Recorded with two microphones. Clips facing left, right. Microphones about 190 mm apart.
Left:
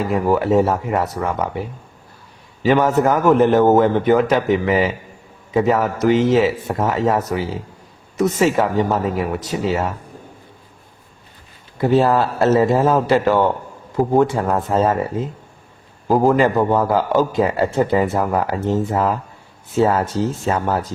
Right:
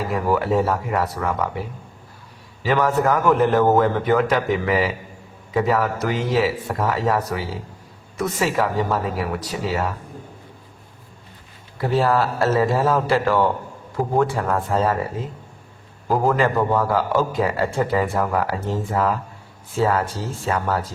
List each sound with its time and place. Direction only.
0.1 s a man's voice: 25° left (ahead or behind)
2.6 s a man's voice: 25° left (ahead or behind)
11.8 s a man's voice: 20° left (ahead or behind)
16.0 s a man's voice: 25° left (ahead or behind)